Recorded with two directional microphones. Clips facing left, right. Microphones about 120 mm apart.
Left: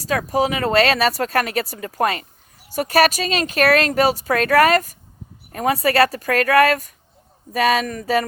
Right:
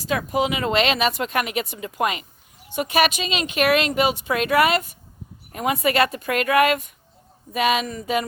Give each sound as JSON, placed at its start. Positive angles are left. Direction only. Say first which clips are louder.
{"t": 0.1, "sound": "speech", "louder": "left 3 dB", "side_deg": 35}